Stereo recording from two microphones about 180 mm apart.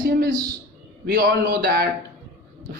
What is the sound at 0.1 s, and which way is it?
Speech, 55° right (ahead or behind).